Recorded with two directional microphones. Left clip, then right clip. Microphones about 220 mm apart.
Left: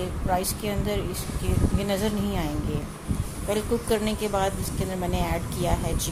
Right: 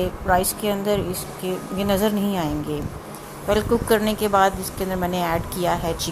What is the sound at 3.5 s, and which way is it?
A woman's voice, 15° right (ahead or behind).